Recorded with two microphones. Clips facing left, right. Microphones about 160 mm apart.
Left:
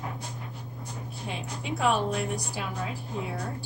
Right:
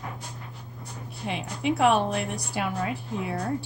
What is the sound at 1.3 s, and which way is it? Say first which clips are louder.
A woman's voice: right 7 dB; 70° right (ahead or behind).